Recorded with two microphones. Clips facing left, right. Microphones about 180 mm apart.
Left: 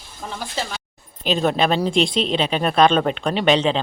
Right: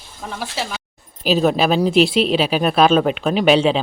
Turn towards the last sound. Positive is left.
turn(degrees=-10)  # may be behind; listen again after turning